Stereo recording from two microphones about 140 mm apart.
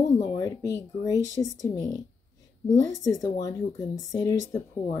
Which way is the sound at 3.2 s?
25° left (ahead or behind).